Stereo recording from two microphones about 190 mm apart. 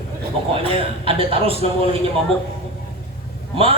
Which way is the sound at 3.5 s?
30° right (ahead or behind).